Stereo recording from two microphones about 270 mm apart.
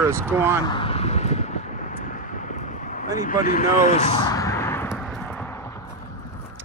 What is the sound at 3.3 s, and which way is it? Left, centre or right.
Speech, left.